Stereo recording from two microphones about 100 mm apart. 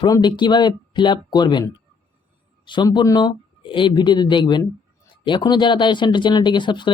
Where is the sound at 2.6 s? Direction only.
50° left (ahead or behind).